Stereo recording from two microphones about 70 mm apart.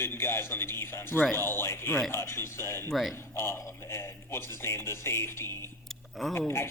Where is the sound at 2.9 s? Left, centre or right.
Centre.